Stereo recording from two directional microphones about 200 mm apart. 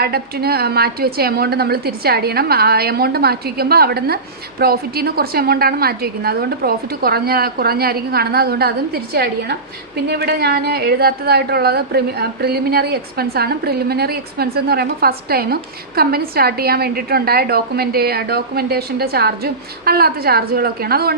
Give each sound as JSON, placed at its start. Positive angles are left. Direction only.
{"t": 0.0, "sound": "a woman's voice", "side_deg": -50}